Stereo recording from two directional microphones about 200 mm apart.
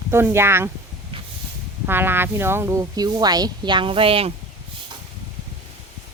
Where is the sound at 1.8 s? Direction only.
10° right (ahead or behind); by 4.3 s 30° right (ahead or behind).